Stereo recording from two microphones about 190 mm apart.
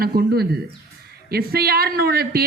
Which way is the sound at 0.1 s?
50° right (ahead or behind).